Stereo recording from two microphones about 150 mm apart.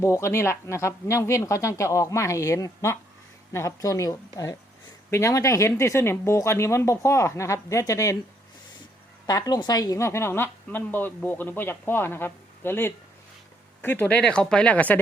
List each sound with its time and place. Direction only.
0.0 s speech: 20° left (ahead or behind)
9.2 s a woman's voice: 25° left (ahead or behind); by 15.0 s 10° left (ahead or behind)